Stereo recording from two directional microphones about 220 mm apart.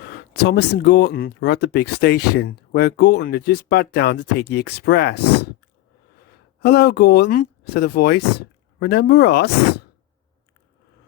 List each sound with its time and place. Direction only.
0.4 s speech: 50° left (ahead or behind)
6.6 s speech: 50° left (ahead or behind)